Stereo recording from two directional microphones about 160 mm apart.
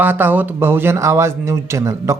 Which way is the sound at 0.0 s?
10° right (ahead or behind).